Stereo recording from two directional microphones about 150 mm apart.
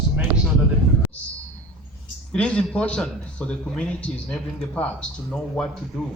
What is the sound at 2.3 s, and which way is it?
A man's voice, 5° left (ahead or behind).